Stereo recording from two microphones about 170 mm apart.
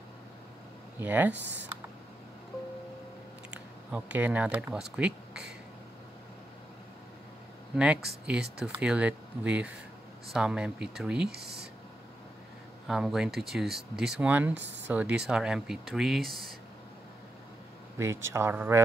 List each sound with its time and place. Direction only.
1.0 s speech: 10° right (ahead or behind)
3.5 s speech: 10° right (ahead or behind)
7.7 s speech: 5° right (ahead or behind)
11.2 s speech: 70° right (ahead or behind)
12.8 s speech: 5° right (ahead or behind)
14.5 s speech: 90° right
14.9 s speech: 10° right (ahead or behind)
17.9 s speech: 15° right (ahead or behind)